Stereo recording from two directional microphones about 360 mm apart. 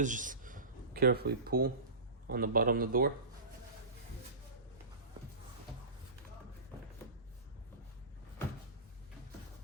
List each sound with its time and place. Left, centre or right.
0.0 s a man's voice: right